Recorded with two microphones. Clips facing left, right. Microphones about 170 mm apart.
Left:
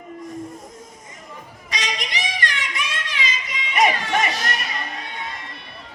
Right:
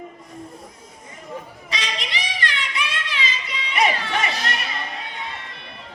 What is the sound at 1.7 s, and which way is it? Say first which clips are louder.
Child singing: left 1 dB; 45° left (ahead or behind).